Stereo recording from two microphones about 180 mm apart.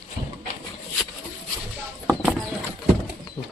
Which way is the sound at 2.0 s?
Centre (ahead or behind).